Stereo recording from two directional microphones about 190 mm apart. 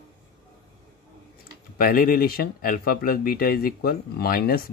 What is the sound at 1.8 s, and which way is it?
Speech, 50° left (ahead or behind).